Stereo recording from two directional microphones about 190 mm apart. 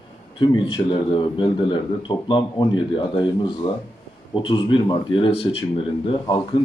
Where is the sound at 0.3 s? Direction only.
25° left (ahead or behind).